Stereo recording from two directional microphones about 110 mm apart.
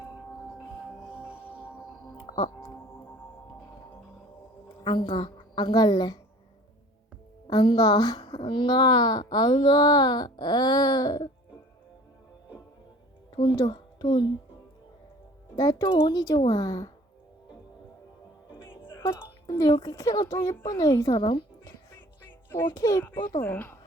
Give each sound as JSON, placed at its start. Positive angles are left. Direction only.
{"t": 1.1, "sound": "music", "side_deg": -10}
{"t": 2.1, "sound": "music", "side_deg": 40}
{"t": 4.8, "sound": "a woman's voice", "side_deg": 45}
{"t": 7.5, "sound": "a woman's voice", "side_deg": 40}
{"t": 13.6, "sound": "a child's voice", "side_deg": 40}
{"t": 15.5, "sound": "speech", "side_deg": 35}
{"t": 15.9, "sound": "speech", "side_deg": 55}
{"t": 16.1, "sound": "speech", "side_deg": 35}
{"t": 19.5, "sound": "a sound", "side_deg": 30}
{"t": 19.8, "sound": "speech", "side_deg": 30}
{"t": 22.4, "sound": "a child's voice", "side_deg": 20}
{"t": 22.7, "sound": "speech", "side_deg": 30}
{"t": 23.4, "sound": "speech", "side_deg": 20}